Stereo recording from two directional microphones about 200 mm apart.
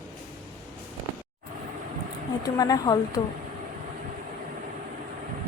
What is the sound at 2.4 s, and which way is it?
Speech, 15° left (ahead or behind).